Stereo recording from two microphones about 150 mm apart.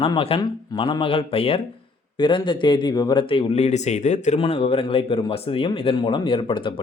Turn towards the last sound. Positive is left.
turn(degrees=35)  # may be behind; listen again after turning